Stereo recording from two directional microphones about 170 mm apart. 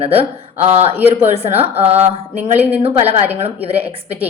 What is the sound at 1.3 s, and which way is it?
A woman's voice, 35° right (ahead or behind).